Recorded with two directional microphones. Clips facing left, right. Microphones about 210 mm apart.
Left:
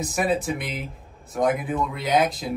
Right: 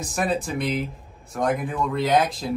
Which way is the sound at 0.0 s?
Centre (ahead or behind).